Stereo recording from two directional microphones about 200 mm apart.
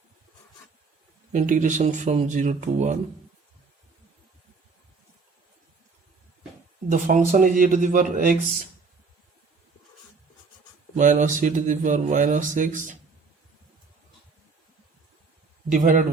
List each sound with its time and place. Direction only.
1.3 s speech: 40° right (ahead or behind)
6.9 s speech: 40° right (ahead or behind)
10.9 s speech: 40° right (ahead or behind)
15.7 s speech: 40° right (ahead or behind)